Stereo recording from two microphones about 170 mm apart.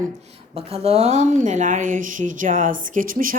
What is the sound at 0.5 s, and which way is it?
A woman's voice, 35° right (ahead or behind).